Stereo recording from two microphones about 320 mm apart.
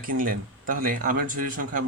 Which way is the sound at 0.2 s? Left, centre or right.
Right.